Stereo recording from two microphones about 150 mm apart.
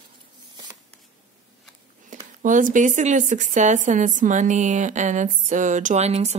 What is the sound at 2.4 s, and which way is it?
A woman's voice, 60° right (ahead or behind).